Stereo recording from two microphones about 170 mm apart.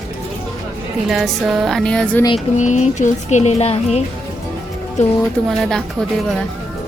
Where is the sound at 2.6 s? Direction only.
45° left (ahead or behind).